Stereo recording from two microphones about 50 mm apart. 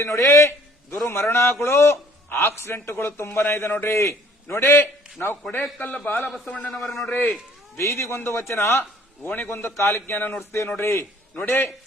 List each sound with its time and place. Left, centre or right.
0.0 s a man's voice: left
4.4 s a man's voice: left
5.2 s a man's voice: left
6.4 s a man's voice: left
6.7 s a man's voice: centre
7.1 s a man's voice: left
7.8 s a man's voice: left
8.1 s a man's voice: left
8.8 s a man's voice: left
9.5 s a man's voice: left
9.7 s a man's voice: left
10.2 s a man's voice: left
10.8 s a man's voice: left